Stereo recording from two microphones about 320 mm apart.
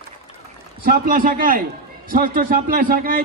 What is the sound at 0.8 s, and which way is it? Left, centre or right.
A man's voice, right.